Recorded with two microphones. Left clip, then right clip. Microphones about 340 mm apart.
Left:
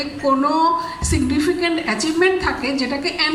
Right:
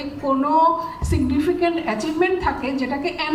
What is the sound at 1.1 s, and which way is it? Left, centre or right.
A woman's voice, right.